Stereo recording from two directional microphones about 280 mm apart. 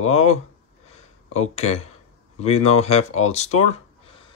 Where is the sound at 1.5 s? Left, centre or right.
Left.